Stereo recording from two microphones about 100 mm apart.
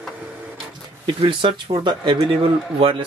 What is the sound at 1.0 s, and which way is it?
Speech, 55° right (ahead or behind).